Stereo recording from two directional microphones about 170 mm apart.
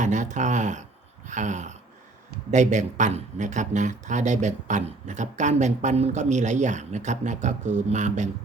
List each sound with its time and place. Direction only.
0.0 s speech: 45° right (ahead or behind)